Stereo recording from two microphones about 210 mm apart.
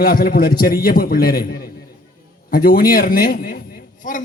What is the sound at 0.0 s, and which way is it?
A man's voice, 45° left (ahead or behind).